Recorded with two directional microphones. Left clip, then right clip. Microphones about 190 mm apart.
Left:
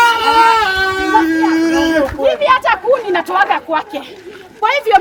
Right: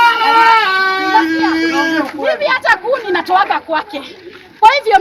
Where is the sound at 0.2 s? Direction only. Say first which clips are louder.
Right 1 dB; 20° right (ahead or behind).